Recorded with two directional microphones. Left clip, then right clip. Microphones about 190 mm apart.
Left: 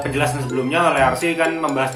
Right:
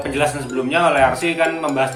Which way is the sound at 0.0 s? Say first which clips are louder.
Right 1 dB; 5° right (ahead or behind).